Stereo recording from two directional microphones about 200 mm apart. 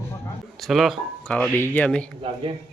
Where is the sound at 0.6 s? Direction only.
Centre (ahead or behind).